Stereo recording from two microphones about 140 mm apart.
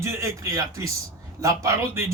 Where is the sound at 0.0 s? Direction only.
20° right (ahead or behind).